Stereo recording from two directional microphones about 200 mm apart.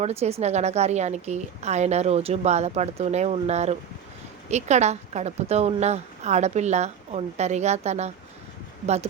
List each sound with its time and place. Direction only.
0.0 s a woman's voice: 30° right (ahead or behind)